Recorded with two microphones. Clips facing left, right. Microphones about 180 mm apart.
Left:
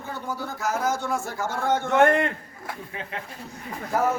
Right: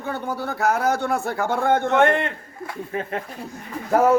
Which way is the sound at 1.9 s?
Centre (ahead or behind).